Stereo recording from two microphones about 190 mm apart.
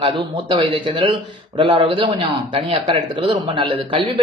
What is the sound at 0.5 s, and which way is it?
Speech, 30° right (ahead or behind).